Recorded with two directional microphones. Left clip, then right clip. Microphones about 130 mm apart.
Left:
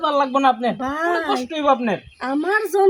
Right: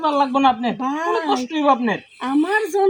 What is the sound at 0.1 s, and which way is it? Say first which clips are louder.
Speech: even; 40° left (ahead or behind).